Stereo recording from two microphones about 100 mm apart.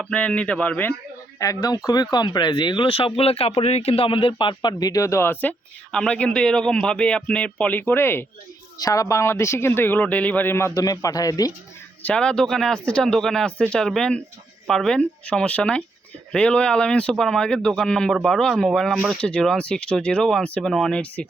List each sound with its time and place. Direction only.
0.1 s speech: 10° left (ahead or behind)
1.4 s speech: 35° left (ahead or behind); by 5.5 s 20° left (ahead or behind)
5.9 s speech: 10° left (ahead or behind)
8.8 s speech: 35° left (ahead or behind)
10.8 s speech: 35° left (ahead or behind)
12.0 s speech: 10° left (ahead or behind)